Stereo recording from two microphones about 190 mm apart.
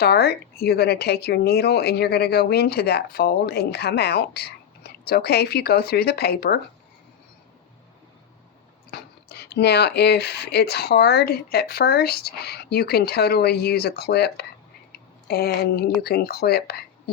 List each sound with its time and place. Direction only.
0.0 s speech: 55° left (ahead or behind)
8.9 s speech: 60° left (ahead or behind)